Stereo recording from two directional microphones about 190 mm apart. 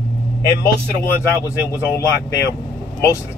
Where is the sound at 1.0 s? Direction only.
15° left (ahead or behind).